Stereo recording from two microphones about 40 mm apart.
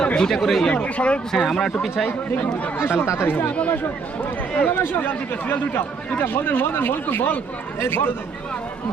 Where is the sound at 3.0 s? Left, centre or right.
Left.